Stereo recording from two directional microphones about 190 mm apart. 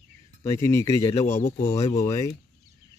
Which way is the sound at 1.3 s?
40° left (ahead or behind).